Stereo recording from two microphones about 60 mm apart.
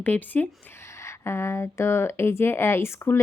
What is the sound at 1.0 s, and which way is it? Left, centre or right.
A woman's voice, left.